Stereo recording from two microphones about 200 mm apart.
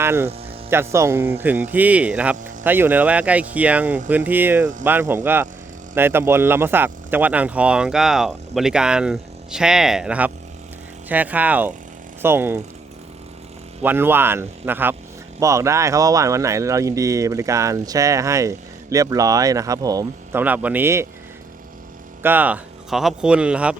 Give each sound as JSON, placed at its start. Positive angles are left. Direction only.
{"t": 0.0, "sound": "speech", "side_deg": -10}
{"t": 13.8, "sound": "speech", "side_deg": -10}
{"t": 22.2, "sound": "speech", "side_deg": -10}